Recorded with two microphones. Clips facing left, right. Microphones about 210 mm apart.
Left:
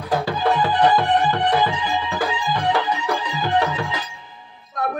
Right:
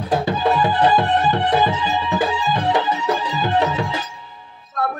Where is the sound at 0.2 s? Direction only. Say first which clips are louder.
Right 2 dB; 20° right (ahead or behind).